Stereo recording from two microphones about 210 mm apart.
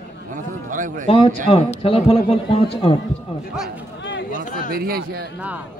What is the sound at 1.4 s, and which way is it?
A man's voice, 25° left (ahead or behind).